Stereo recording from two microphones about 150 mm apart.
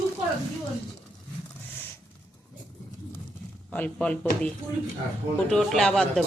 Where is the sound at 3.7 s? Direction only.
10° left (ahead or behind).